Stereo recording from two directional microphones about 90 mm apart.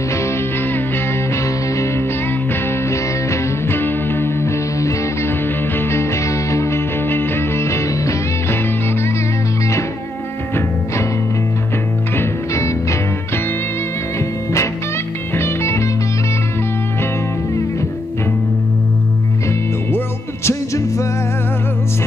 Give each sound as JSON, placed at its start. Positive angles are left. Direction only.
{"t": 0.1, "sound": "music", "side_deg": 25}
{"t": 12.2, "sound": "music", "side_deg": 35}
{"t": 15.3, "sound": "music", "side_deg": 30}
{"t": 20.4, "sound": "music", "side_deg": 35}